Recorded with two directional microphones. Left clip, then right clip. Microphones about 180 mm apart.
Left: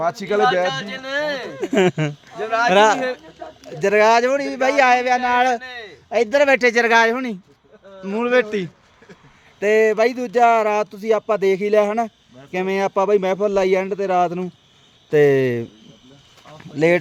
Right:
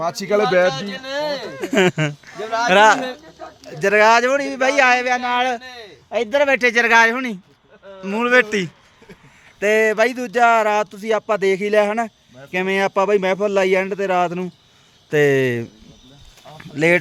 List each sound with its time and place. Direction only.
0.0 s speech: 25° right (ahead or behind)
0.7 s speech: centre (ahead or behind)
5.3 s speech: 20° left (ahead or behind)
5.5 s speech: 5° right (ahead or behind)
6.1 s speech: 15° left (ahead or behind); by 15.7 s centre (ahead or behind)
16.6 s a sound: centre (ahead or behind)